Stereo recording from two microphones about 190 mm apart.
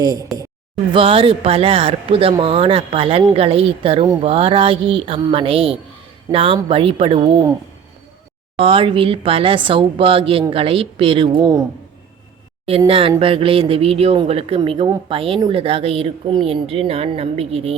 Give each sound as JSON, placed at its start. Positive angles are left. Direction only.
{"t": 0.0, "sound": "speech", "side_deg": -20}
{"t": 8.5, "sound": "speech", "side_deg": -30}
{"t": 12.9, "sound": "speech", "side_deg": -30}